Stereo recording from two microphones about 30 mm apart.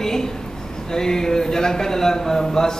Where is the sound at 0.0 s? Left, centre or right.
Centre.